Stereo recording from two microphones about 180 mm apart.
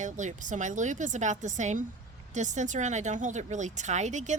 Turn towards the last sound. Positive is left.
turn(degrees=-40)  # may be behind; listen again after turning